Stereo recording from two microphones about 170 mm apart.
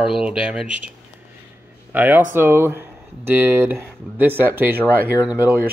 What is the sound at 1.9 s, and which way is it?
A man's voice, 10° right (ahead or behind).